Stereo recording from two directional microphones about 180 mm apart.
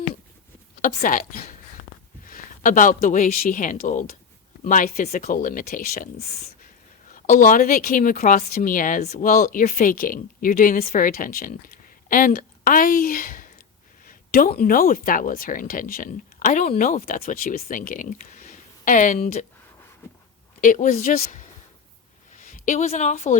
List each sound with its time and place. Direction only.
0.8 s a woman's voice: 45° left (ahead or behind)
7.1 s a woman's voice: 45° left (ahead or behind)
20.6 s a woman's voice: 45° left (ahead or behind)